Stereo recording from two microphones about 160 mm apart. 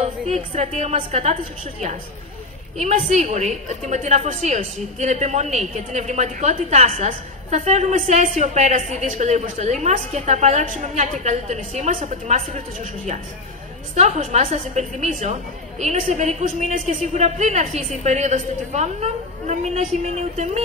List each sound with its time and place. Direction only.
0.3 s a woman's voice: 45° right (ahead or behind)